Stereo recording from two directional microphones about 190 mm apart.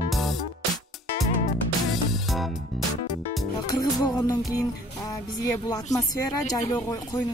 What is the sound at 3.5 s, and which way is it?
Music, 20° left (ahead or behind).